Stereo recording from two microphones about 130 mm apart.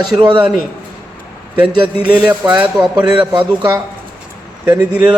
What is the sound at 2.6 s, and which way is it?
Speech, 10° right (ahead or behind).